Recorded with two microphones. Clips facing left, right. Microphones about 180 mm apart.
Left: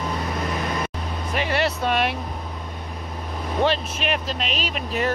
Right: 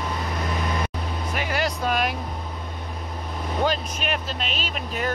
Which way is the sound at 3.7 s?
Centre (ahead or behind).